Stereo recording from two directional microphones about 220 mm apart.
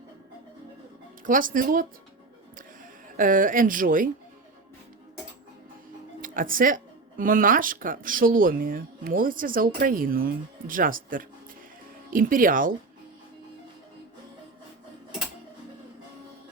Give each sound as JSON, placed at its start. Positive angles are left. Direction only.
{"t": 1.2, "sound": "speech", "side_deg": -35}
{"t": 3.2, "sound": "speech", "side_deg": -40}
{"t": 6.2, "sound": "speech", "side_deg": -40}